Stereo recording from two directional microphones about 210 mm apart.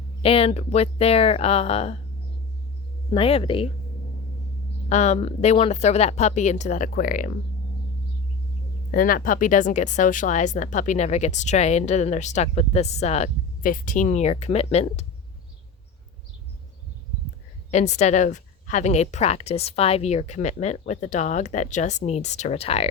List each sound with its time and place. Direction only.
0.2 s speech: 25° left (ahead or behind)
3.1 s speech: 25° left (ahead or behind)
4.9 s speech: 30° left (ahead or behind)
8.9 s speech: 40° left (ahead or behind)
17.7 s speech: 35° left (ahead or behind)